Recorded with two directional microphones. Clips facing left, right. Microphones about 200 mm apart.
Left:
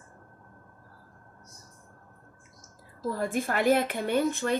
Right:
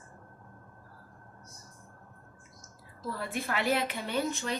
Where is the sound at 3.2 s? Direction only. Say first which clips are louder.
Left 5 dB; 45° left (ahead or behind).